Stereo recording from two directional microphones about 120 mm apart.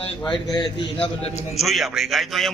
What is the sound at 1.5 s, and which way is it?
Speech, centre (ahead or behind).